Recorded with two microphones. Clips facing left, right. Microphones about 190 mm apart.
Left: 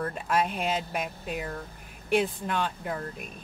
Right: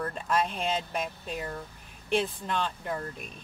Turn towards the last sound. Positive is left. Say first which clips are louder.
# left 1 dB
turn(degrees=10)  # may be behind; listen again after turning